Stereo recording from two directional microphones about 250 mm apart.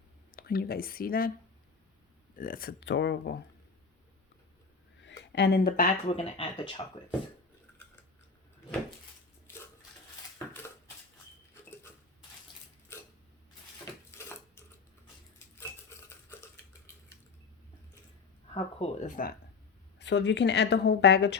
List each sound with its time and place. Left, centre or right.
0.3 s speech: left
2.3 s speech: left
5.0 s speech: left; by 6.8 s centre
10.3 s dishes: centre
12.9 s a sound: centre
14.2 s a sound: centre
16.0 s a sound: centre
18.5 s speech: left
20.0 s a woman's voice: left